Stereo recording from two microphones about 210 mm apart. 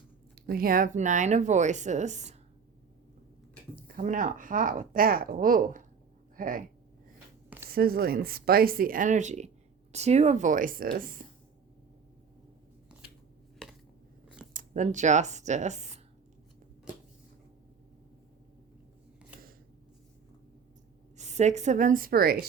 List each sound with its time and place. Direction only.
0.4 s speech: 45° right (ahead or behind)
3.9 s speech: 40° right (ahead or behind)
7.7 s speech: 45° right (ahead or behind)
14.5 s speech: 40° right (ahead or behind)
21.2 s speech: 35° right (ahead or behind)